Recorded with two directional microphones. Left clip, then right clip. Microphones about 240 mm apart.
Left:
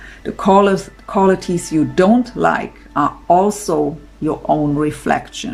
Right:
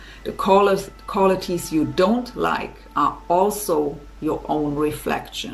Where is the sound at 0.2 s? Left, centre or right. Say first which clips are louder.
Left 4 dB; left.